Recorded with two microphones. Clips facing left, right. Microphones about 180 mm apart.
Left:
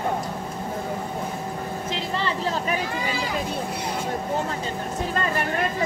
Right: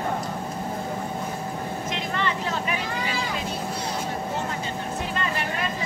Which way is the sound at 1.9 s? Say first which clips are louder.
Left 1 dB; 30° left (ahead or behind).